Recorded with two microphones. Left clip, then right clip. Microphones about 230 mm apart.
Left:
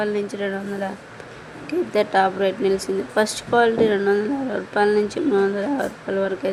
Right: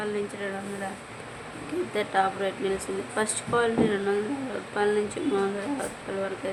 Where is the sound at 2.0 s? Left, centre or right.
Left.